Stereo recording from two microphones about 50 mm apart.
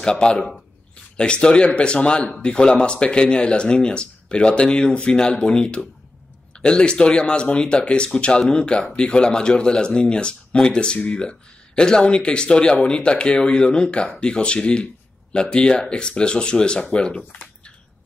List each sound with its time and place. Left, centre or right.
0.0 s speech: centre